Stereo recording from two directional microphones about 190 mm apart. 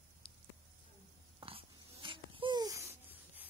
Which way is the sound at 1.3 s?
25° right (ahead or behind).